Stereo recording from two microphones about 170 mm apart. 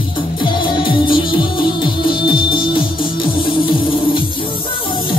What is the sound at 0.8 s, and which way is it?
Music, 30° left (ahead or behind).